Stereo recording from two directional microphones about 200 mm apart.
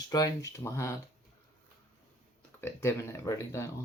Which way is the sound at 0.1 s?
20° left (ahead or behind).